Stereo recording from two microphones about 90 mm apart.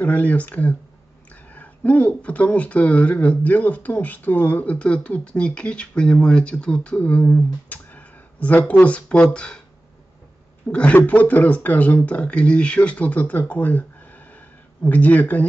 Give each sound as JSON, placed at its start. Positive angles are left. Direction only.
{"t": 0.0, "sound": "speech", "side_deg": 15}
{"t": 10.7, "sound": "speech", "side_deg": 15}